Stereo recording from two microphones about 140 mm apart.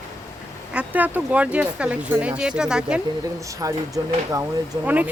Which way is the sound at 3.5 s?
25° right (ahead or behind).